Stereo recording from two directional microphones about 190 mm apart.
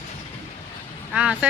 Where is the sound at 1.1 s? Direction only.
5° right (ahead or behind).